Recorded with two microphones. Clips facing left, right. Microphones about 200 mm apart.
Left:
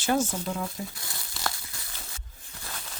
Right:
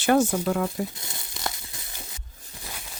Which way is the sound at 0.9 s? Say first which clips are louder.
Right 2 dB; 20° right (ahead or behind).